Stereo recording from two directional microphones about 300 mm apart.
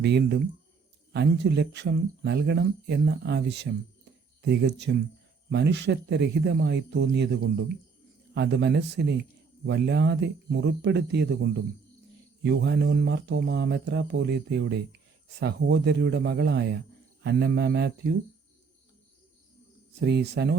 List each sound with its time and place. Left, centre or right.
0.0 s speech: right
20.0 s speech: right